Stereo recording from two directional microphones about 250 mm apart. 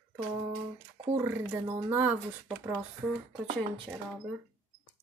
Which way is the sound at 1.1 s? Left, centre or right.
Centre.